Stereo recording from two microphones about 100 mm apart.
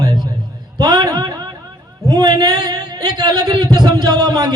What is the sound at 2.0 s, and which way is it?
Speech, 40° right (ahead or behind).